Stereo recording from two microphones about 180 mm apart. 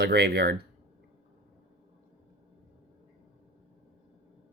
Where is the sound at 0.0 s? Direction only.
60° right (ahead or behind).